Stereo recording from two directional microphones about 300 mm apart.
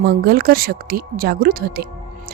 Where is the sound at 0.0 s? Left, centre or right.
Right.